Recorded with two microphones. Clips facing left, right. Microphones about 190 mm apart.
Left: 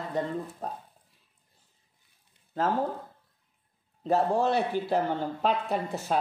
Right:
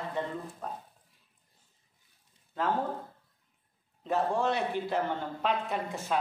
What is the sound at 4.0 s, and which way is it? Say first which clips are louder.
Speech: left 4 dB; 35° left (ahead or behind).